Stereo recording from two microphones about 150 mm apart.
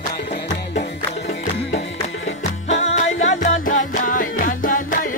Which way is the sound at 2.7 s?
45° left (ahead or behind).